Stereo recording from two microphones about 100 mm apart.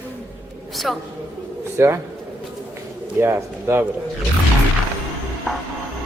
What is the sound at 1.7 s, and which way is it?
Speech, 25° right (ahead or behind).